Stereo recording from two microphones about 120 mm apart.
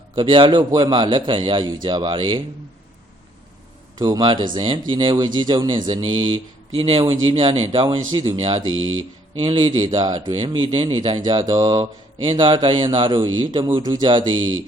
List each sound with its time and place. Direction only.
0.2 s speech: 45° right (ahead or behind)
3.9 s speech: 35° right (ahead or behind)